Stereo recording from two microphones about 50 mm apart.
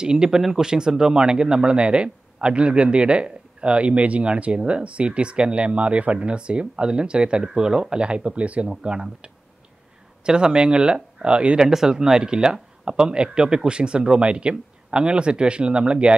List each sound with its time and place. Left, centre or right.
0.0 s speech: centre
11.6 s speech: centre